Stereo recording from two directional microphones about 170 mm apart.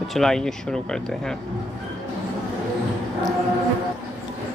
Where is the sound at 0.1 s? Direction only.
5° left (ahead or behind).